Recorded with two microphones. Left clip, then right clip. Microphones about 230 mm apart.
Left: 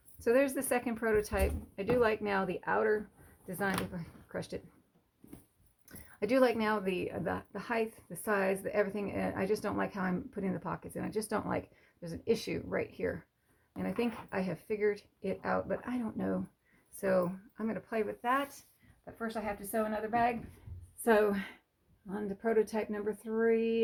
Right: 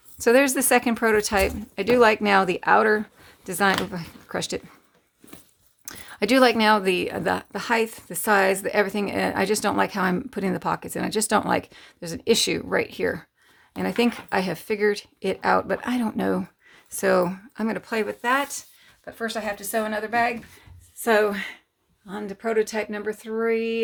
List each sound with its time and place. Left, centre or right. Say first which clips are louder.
0.2 s speech: right 10 dB; right
5.8 s a woman's voice: right 11 dB; right
21.0 s speech: right 8 dB; centre